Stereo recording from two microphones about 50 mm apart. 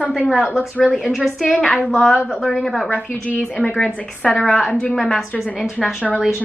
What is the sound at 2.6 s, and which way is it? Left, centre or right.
Speech, centre.